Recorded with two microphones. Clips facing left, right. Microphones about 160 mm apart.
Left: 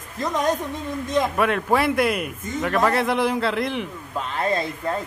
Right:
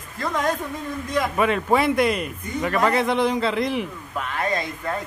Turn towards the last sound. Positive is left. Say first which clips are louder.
# left 2 dB
turn(degrees=30)  # may be behind; listen again after turning